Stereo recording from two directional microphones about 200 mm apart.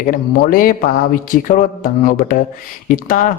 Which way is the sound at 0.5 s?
45° left (ahead or behind).